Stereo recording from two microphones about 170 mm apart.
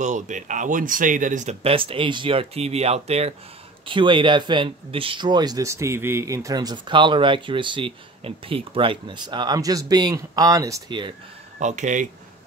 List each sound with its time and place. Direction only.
0.0 s speech: 45° right (ahead or behind); by 11.1 s 25° right (ahead or behind)
11.6 s speech: 45° right (ahead or behind)